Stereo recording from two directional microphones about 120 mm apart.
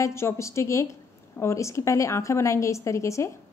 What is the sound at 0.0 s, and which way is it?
A woman's voice, 20° left (ahead or behind).